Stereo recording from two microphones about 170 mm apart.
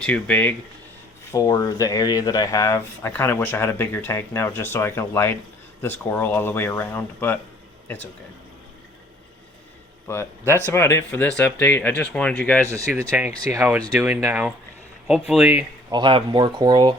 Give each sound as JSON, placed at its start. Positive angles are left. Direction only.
{"t": 0.0, "sound": "speech", "side_deg": 10}
{"t": 10.1, "sound": "speech", "side_deg": 15}
{"t": 12.6, "sound": "speech", "side_deg": -20}
{"t": 15.9, "sound": "speech", "side_deg": -25}